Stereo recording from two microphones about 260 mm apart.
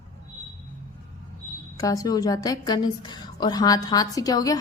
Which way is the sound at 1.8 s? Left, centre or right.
Centre.